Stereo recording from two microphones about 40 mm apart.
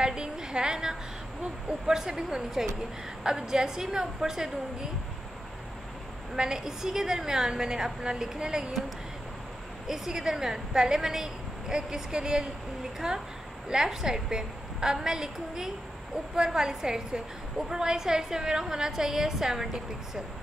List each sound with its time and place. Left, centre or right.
0.0 s a woman's voice: centre
6.3 s a woman's voice: centre
9.8 s a woman's voice: centre